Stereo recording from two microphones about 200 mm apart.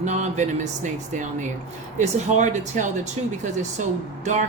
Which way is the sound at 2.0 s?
35° right (ahead or behind).